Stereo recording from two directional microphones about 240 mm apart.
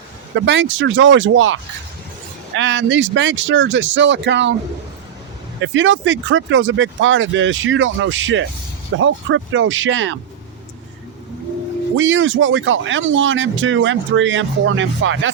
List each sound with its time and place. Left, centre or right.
0.3 s speech: right
2.6 s speech: right
5.5 s speech: right
11.9 s speech: right